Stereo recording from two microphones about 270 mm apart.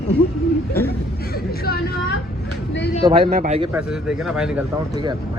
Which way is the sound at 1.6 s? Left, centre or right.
Left.